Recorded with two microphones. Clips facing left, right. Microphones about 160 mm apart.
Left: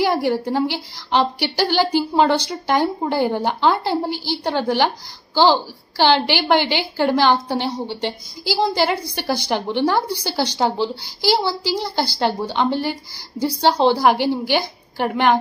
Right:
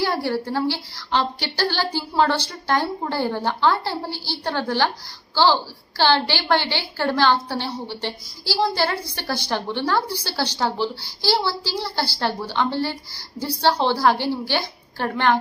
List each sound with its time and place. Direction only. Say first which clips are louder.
0.0 s a woman's voice: left 4 dB; 15° left (ahead or behind)